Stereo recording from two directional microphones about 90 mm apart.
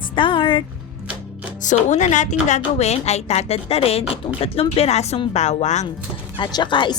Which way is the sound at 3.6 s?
90° left.